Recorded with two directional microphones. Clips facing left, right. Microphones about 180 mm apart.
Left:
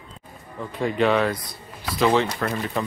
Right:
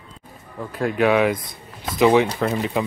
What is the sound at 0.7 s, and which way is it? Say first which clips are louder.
Speech: right 2 dB; 5° right (ahead or behind).